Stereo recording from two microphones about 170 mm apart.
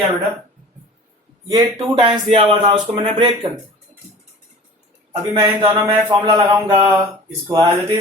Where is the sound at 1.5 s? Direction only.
25° right (ahead or behind).